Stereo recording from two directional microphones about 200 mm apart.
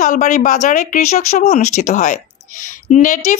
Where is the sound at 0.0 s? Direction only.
40° left (ahead or behind).